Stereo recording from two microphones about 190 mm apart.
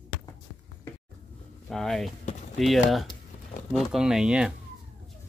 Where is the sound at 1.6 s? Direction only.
Centre (ahead or behind).